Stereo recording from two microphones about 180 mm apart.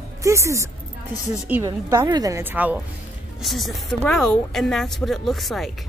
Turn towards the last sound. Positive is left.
turn(degrees=0)  # may be behind; listen again after turning